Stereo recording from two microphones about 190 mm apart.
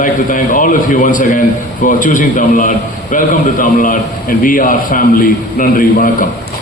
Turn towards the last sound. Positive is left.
turn(degrees=50)  # may be behind; listen again after turning